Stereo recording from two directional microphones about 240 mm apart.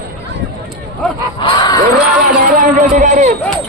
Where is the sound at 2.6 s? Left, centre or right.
Right.